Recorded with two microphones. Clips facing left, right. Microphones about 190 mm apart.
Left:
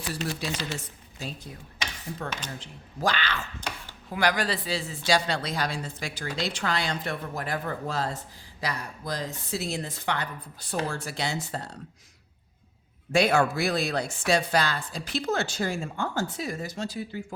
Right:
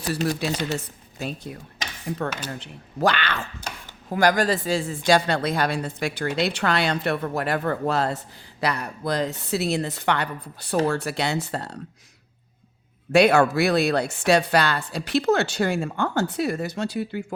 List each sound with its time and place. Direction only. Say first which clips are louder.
0.3 s speech: right 6 dB; 65° right (ahead or behind)
4.1 s speech: right 6 dB; 45° right (ahead or behind); by 11.8 s 70° right (ahead or behind)
13.1 s speech: right 6 dB; 65° right (ahead or behind)